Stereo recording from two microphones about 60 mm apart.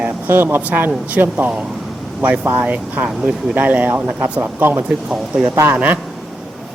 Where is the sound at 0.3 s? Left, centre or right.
Right.